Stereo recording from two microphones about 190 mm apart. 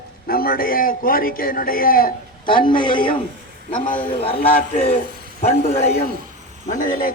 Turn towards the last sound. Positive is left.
turn(degrees=45)  # may be behind; listen again after turning